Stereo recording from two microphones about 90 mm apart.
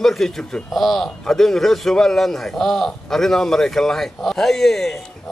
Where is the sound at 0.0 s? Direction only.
5° left (ahead or behind).